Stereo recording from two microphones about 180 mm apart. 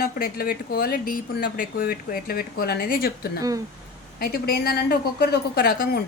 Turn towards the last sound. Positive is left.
turn(degrees=55)  # may be behind; listen again after turning